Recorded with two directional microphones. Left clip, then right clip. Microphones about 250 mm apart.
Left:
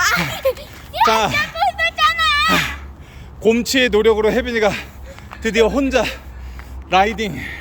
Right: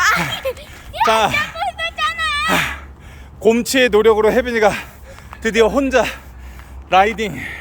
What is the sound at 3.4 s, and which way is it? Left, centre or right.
Speech, centre.